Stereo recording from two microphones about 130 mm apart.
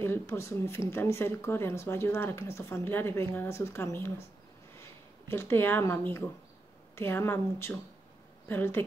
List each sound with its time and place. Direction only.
0.0 s speech: 20° left (ahead or behind)
5.3 s speech: 20° left (ahead or behind)